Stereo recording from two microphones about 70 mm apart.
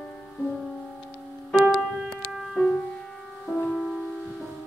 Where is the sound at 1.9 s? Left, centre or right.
Centre.